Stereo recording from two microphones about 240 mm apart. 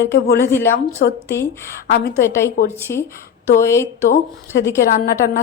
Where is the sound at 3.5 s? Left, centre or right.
Centre.